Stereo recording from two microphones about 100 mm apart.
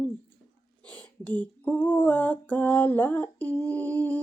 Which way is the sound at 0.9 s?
15° left (ahead or behind).